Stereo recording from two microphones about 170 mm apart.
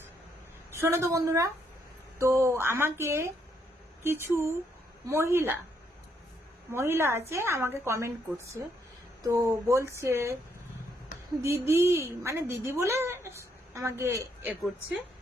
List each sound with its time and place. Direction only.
0.8 s a woman's voice: 15° right (ahead or behind)
6.7 s a woman's voice: 15° right (ahead or behind)
11.4 s a woman's voice: 15° right (ahead or behind)